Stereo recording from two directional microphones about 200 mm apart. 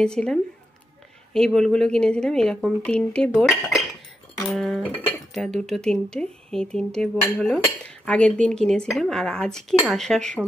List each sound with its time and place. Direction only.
0.0 s speech: 5° left (ahead or behind)